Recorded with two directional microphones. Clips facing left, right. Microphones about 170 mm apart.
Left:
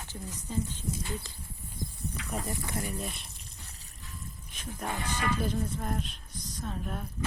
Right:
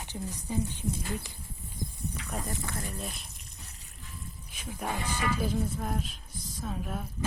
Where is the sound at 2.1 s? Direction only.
10° left (ahead or behind).